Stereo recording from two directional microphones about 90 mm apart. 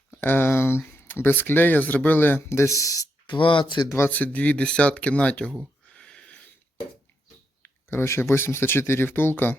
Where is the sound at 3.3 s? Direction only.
70° left (ahead or behind).